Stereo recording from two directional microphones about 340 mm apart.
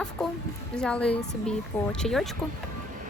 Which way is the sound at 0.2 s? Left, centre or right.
Centre.